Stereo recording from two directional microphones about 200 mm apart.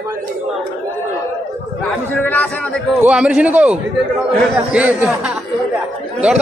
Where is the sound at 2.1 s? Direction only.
10° left (ahead or behind).